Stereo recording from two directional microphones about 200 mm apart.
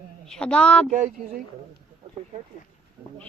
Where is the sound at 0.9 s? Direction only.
35° right (ahead or behind).